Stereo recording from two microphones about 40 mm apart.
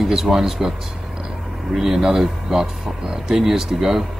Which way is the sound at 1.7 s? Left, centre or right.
Centre.